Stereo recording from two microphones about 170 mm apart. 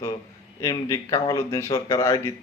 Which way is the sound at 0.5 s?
20° left (ahead or behind).